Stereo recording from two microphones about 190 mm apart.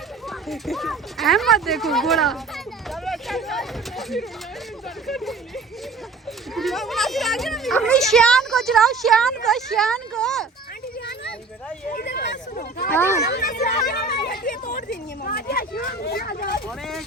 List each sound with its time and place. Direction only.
0.3 s a child's voice: centre (ahead or behind)
6.5 s a child's voice: centre (ahead or behind)
11.9 s a sound: 55° left (ahead or behind)
12.9 s speech: 10° left (ahead or behind)
13.2 s speech: 55° left (ahead or behind)
13.9 s a sound: 50° left (ahead or behind)
14.8 s speech: 55° left (ahead or behind)
16.6 s a child's voice: centre (ahead or behind)